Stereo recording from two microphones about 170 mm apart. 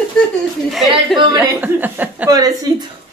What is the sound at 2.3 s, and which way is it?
Speech, 20° right (ahead or behind).